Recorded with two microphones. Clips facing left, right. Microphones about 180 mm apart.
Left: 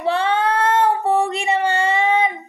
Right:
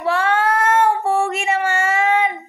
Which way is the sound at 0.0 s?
25° left (ahead or behind).